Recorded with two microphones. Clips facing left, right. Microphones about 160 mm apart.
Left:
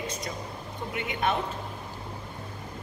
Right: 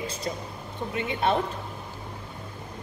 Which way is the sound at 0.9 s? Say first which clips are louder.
Right 3 dB; 30° right (ahead or behind).